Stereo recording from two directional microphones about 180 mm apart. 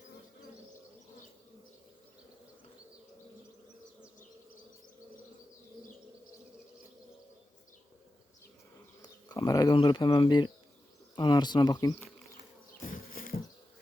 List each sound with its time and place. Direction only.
9.0 s bird: 20° left (ahead or behind)
9.7 s speech: 25° left (ahead or behind)
12.8 s bee: 50° left (ahead or behind)